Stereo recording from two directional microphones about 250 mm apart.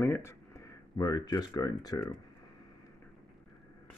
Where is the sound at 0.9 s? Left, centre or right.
Centre.